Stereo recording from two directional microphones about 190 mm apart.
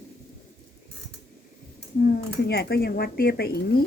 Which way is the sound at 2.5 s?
55° left (ahead or behind).